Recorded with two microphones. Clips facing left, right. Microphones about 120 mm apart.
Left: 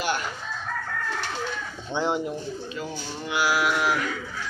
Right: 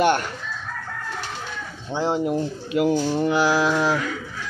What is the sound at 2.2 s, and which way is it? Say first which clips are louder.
Speech: right 7 dB; 60° right (ahead or behind).